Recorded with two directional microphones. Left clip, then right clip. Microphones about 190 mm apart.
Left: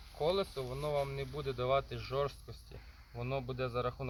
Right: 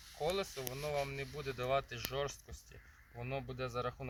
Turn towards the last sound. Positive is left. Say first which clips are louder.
# left 3 dB
turn(degrees=15)  # may be behind; listen again after turning